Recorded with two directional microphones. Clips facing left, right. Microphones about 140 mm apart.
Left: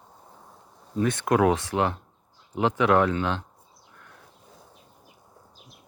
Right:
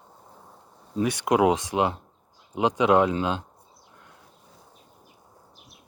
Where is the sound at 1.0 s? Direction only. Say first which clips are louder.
Even; 15° right (ahead or behind).